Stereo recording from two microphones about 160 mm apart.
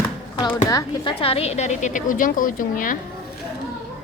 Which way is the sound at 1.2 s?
40° left (ahead or behind).